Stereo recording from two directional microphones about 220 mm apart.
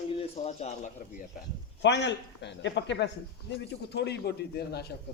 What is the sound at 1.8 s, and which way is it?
A man's voice, 50° left (ahead or behind).